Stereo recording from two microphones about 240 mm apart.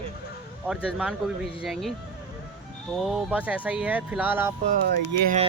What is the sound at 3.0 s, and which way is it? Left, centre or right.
Speech, centre.